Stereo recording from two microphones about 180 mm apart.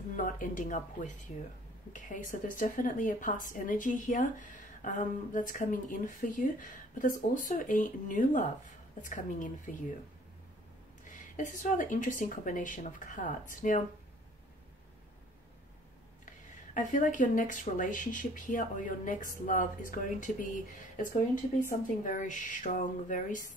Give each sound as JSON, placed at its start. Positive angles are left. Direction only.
{"t": 0.1, "sound": "speech", "side_deg": 45}
{"t": 11.1, "sound": "speech", "side_deg": 45}
{"t": 16.7, "sound": "speech", "side_deg": 45}